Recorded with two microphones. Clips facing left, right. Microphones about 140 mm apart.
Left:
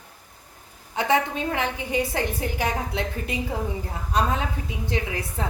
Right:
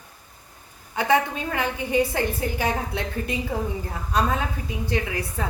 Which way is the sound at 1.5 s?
15° left (ahead or behind).